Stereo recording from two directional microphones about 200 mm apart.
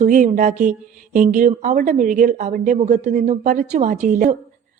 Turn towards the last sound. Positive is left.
turn(degrees=-40)  # may be behind; listen again after turning